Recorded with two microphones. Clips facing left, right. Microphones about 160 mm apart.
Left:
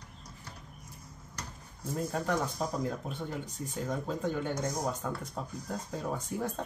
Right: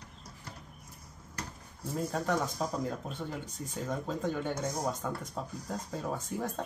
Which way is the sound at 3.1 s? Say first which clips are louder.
Left 1 dB; 10° left (ahead or behind).